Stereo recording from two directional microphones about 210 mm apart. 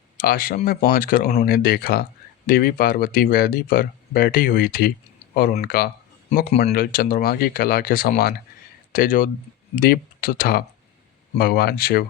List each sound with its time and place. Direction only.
0.2 s speech: 45° left (ahead or behind)